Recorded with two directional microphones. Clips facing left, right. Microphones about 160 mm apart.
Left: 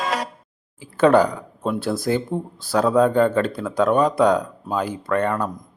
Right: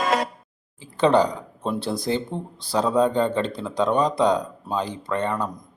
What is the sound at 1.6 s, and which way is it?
Speech, 25° right (ahead or behind).